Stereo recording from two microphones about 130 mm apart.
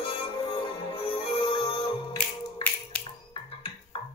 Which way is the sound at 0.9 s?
45° left (ahead or behind).